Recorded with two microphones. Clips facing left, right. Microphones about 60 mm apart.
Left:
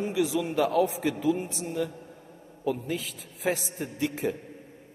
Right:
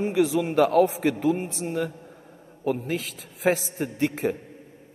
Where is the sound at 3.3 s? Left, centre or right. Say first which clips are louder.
Right 6 dB; right.